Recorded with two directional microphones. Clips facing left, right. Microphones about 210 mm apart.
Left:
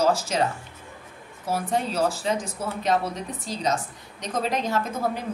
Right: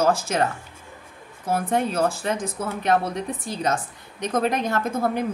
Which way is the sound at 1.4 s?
55° right (ahead or behind).